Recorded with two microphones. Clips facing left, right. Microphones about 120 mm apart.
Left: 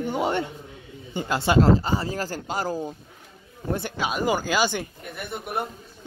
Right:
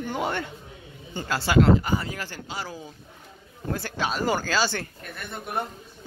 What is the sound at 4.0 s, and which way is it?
Speech, 10° left (ahead or behind).